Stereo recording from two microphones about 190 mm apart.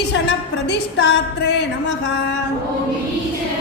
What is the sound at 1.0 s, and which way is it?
Music, 65° left (ahead or behind).